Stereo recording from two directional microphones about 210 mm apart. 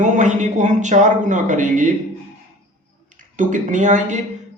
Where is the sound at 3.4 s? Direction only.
35° right (ahead or behind).